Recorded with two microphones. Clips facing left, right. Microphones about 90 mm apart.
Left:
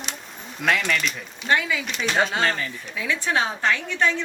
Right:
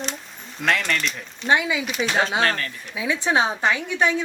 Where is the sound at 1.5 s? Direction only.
15° right (ahead or behind).